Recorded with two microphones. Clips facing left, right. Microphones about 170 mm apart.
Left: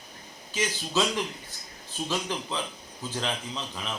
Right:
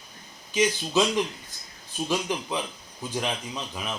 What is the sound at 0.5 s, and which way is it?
Speech, 15° right (ahead or behind).